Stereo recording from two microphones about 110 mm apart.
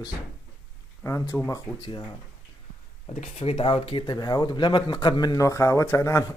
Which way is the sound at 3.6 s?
50° left (ahead or behind).